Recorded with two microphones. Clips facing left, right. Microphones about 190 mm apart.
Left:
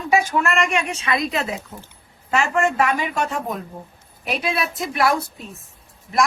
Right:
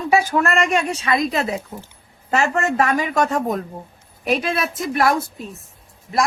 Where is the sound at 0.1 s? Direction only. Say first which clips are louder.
Right 1 dB; 35° right (ahead or behind).